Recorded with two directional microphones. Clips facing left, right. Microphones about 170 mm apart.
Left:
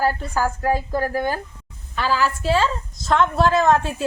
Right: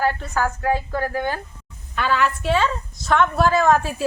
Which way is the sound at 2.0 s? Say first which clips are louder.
Even; centre (ahead or behind).